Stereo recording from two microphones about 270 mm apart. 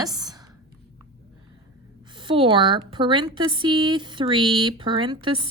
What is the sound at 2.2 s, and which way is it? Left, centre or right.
Speech, centre.